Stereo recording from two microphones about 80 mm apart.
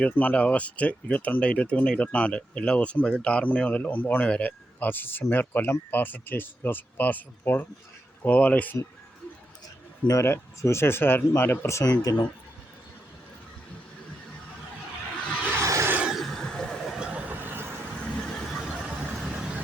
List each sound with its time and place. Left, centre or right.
0.0 s speech: left
10.1 s speech: left
11.9 s speech: left
15.5 s a sound: right
16.0 s neigh: centre
17.0 s vehicle: centre
18.0 s a sound: centre
18.7 s vehicle: centre